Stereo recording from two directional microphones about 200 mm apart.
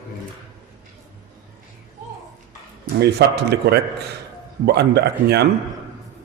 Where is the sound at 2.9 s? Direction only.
55° right (ahead or behind).